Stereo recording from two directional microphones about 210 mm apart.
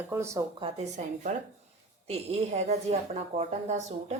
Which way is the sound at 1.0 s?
35° right (ahead or behind).